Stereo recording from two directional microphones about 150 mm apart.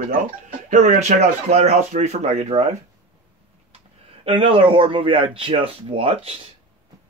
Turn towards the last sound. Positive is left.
turn(degrees=-40)  # may be behind; listen again after turning